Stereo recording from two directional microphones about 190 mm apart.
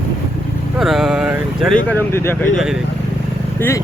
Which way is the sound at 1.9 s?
10° left (ahead or behind).